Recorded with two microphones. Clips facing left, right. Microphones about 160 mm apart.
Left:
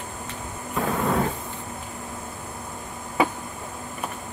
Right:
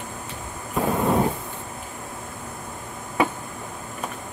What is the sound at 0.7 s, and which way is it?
Vehicle, 20° right (ahead or behind).